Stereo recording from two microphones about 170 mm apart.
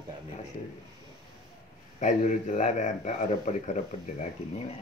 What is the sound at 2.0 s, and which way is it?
Speech, 45° left (ahead or behind).